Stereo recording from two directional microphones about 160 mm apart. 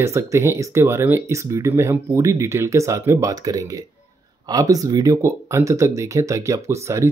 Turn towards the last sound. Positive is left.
turn(degrees=-20)  # may be behind; listen again after turning